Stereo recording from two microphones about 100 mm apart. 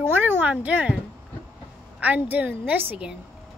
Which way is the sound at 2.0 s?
15° right (ahead or behind).